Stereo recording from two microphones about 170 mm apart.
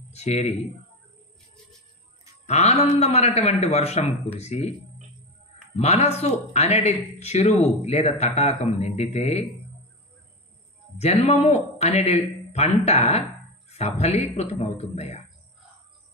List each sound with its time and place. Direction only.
0.1 s speech: 40° left (ahead or behind)
2.4 s speech: 40° left (ahead or behind)
5.8 s speech: 40° left (ahead or behind)
11.0 s speech: 40° left (ahead or behind)